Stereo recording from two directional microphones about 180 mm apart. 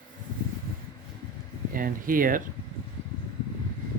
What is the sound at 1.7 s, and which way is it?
Speech, 50° right (ahead or behind).